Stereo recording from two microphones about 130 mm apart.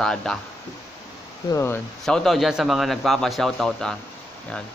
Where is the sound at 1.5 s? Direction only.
20° left (ahead or behind).